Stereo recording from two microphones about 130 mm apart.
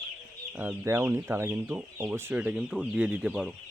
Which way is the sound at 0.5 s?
15° right (ahead or behind).